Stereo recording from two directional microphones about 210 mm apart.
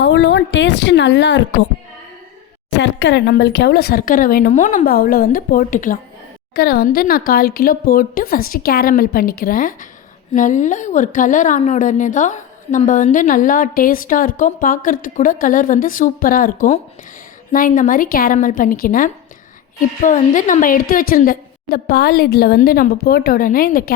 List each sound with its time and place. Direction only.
0.0 s a woman's voice: 60° left (ahead or behind)
2.7 s a woman's voice: 55° left (ahead or behind)